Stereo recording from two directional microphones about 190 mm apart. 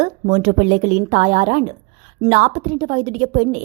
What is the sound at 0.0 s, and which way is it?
A woman's voice, 40° right (ahead or behind).